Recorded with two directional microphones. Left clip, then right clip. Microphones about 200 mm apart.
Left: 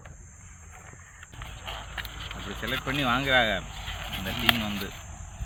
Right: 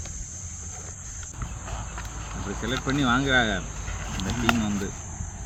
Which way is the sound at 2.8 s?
25° left (ahead or behind).